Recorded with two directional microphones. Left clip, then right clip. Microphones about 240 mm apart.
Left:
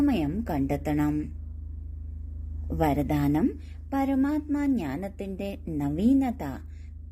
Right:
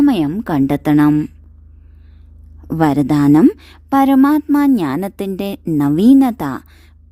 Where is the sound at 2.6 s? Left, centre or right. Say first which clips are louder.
Right 11 dB; right.